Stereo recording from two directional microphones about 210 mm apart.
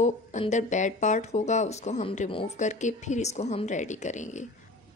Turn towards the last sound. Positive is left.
turn(degrees=35)  # may be behind; listen again after turning